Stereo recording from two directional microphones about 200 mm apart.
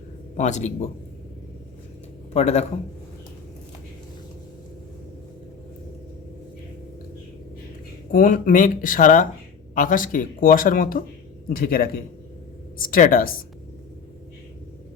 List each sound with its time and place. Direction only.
0.3 s speech: 35° left (ahead or behind)
2.3 s speech: 35° left (ahead or behind)
8.1 s speech: 45° left (ahead or behind)